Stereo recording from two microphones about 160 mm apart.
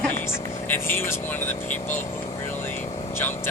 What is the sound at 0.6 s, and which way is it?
Speech, 15° left (ahead or behind).